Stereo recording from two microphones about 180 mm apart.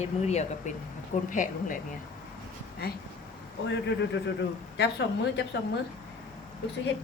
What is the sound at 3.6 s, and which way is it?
Speech, 70° left (ahead or behind).